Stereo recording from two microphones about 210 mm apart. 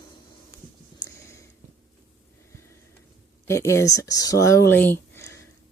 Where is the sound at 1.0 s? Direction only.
15° left (ahead or behind).